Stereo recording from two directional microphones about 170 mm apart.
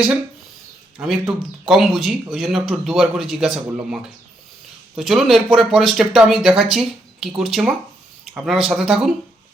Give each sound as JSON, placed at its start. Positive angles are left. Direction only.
{"t": 0.9, "sound": "a man's voice", "side_deg": -5}